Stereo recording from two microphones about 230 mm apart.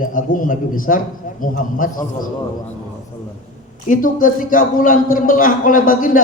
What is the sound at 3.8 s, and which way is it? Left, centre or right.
A man's voice, left.